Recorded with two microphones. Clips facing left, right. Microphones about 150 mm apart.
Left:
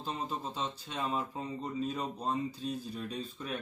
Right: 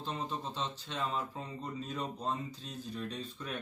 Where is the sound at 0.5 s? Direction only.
10° left (ahead or behind).